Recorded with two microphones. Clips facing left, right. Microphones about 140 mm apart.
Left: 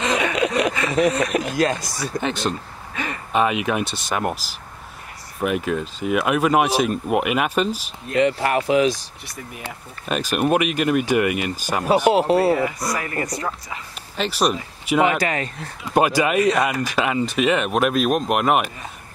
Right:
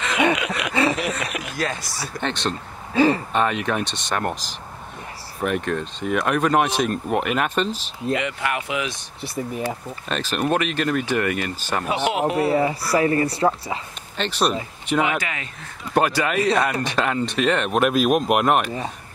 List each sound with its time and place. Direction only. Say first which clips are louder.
0.4 s a sound: left 7 dB; 35° left (ahead or behind)
0.9 s speech: left 8 dB; 35° left (ahead or behind)
2.2 s speech: left 1 dB; 5° left (ahead or behind)
2.9 s speech: right 12 dB; 30° right (ahead or behind)
3.3 s speech: left 2 dB; 5° left (ahead or behind)
8.2 s speech: left 7 dB; 35° left (ahead or behind)
10.0 s speech: left 3 dB; 10° left (ahead or behind)
11.8 s speech: left 6 dB; 35° left (ahead or behind)
12.5 s speech: right 4 dB; 30° right (ahead or behind)
14.1 s speech: left 1 dB; 5° left (ahead or behind)
15.0 s speech: left 5 dB; 40° left (ahead or behind)
15.9 s speech: left 2 dB; 10° left (ahead or behind)